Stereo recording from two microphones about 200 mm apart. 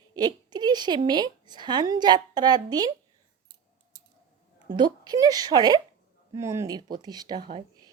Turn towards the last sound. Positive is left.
turn(degrees=-20)  # may be behind; listen again after turning